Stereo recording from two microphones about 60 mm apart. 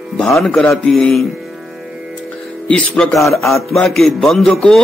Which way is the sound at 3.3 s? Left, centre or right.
Centre.